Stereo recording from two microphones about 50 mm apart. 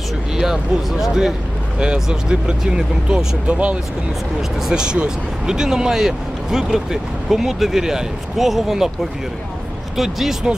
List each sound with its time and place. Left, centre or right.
0.4 s speech: centre
3.4 s speech: right
4.4 s speech: centre
9.9 s speech: centre